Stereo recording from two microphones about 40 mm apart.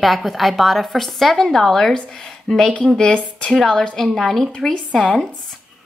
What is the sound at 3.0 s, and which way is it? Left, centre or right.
A woman's voice, centre.